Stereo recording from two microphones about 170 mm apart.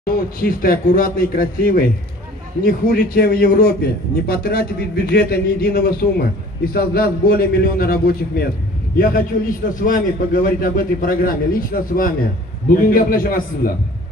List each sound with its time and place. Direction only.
0.0 s a man's voice: 60° left (ahead or behind)